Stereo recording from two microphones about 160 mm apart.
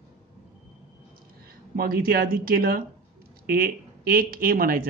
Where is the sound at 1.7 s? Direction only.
70° right (ahead or behind).